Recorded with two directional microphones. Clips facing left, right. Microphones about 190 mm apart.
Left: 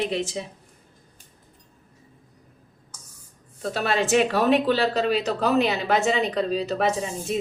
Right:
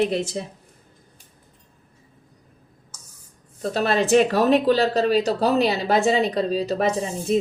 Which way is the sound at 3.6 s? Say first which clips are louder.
Right 3 dB; 40° right (ahead or behind).